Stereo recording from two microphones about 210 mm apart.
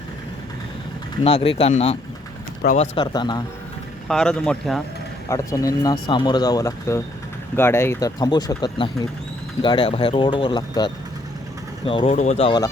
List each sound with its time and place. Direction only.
1.2 s speech: 25° left (ahead or behind)
4.1 s a man's voice: 5° left (ahead or behind)
5.3 s speech: 15° left (ahead or behind)